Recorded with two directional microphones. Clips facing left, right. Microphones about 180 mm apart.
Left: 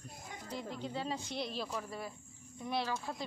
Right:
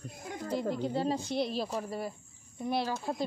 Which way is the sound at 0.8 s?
40° right (ahead or behind).